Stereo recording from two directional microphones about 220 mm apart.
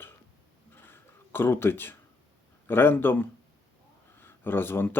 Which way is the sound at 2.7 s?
10° left (ahead or behind).